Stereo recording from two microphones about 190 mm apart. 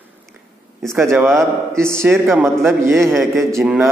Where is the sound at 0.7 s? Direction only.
Centre (ahead or behind).